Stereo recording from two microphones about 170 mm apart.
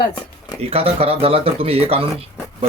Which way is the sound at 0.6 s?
35° right (ahead or behind).